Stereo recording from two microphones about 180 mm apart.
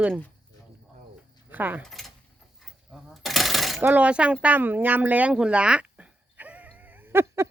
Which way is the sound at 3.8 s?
10° right (ahead or behind).